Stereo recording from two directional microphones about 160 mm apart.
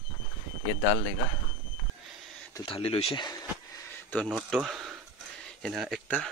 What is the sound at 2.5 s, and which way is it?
Speech, 35° left (ahead or behind).